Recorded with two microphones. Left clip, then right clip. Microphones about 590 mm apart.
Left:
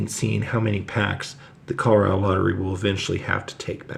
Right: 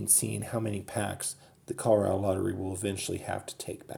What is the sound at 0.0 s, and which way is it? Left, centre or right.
Speech, right.